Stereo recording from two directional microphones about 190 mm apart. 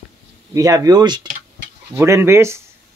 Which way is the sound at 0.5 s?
20° right (ahead or behind).